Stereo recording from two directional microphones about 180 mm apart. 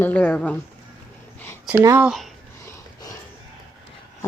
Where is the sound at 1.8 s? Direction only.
15° right (ahead or behind).